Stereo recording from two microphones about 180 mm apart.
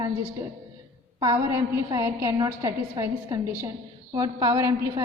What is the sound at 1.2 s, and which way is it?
A woman's voice, 20° right (ahead or behind).